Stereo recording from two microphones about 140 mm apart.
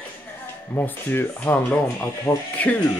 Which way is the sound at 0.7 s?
15° left (ahead or behind).